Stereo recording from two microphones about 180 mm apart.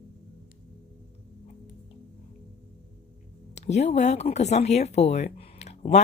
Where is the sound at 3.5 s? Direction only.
40° left (ahead or behind).